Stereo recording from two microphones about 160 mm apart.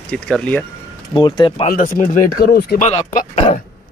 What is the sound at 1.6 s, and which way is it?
Speech, 65° left (ahead or behind).